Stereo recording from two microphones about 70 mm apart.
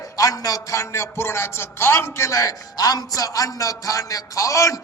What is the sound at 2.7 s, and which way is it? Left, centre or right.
A man's voice, left.